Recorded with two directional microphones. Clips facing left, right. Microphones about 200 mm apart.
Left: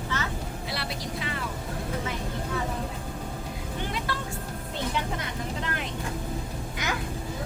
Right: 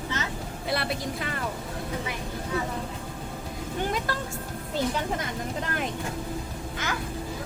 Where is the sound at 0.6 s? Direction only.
55° right (ahead or behind).